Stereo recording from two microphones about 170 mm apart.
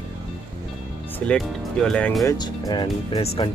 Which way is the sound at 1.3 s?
Centre (ahead or behind).